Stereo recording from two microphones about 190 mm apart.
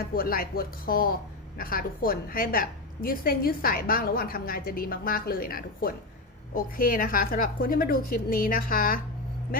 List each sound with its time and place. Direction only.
0.1 s a woman's voice: 50° left (ahead or behind)